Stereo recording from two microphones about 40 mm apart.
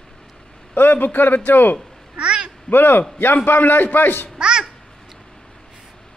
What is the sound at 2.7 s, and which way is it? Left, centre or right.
A man's voice, left.